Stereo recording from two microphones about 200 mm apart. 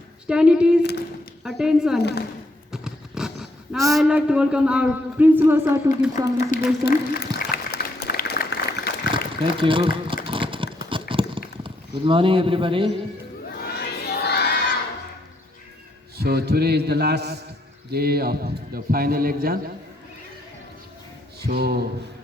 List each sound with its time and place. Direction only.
0.3 s a woman's voice: 5° right (ahead or behind)
0.8 s speech: 55° left (ahead or behind)
1.5 s speech: centre (ahead or behind)
2.0 s speech: 55° left (ahead or behind)
2.7 s a sound: 5° right (ahead or behind)
3.9 s speech: 5° right (ahead or behind)
6.5 s speech: 40° left (ahead or behind)
6.8 s applause: 50° left (ahead or behind)
9.6 s speech: 25° right (ahead or behind)
10.2 s clip-clop: 25° right (ahead or behind)
11.1 s a sound: 25° right (ahead or behind)
13.6 s crowd: 55° left (ahead or behind)
16.1 s a man's voice: 50° right (ahead or behind)
21.4 s a man's voice: 50° right (ahead or behind)